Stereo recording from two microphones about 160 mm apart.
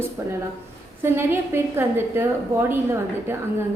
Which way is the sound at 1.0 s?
15° right (ahead or behind).